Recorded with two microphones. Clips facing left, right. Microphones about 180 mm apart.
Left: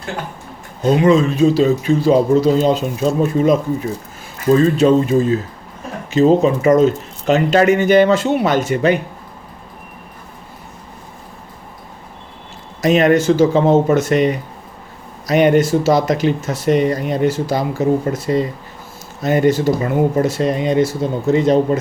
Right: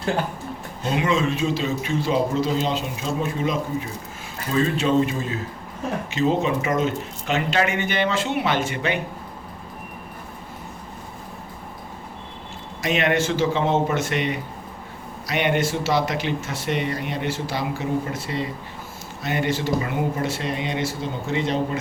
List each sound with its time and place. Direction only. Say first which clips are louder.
0.8 s speech: left 10 dB; 40° left (ahead or behind)
12.8 s speech: left 9 dB; 40° left (ahead or behind)